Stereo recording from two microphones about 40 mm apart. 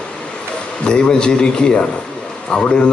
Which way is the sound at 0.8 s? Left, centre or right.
Left.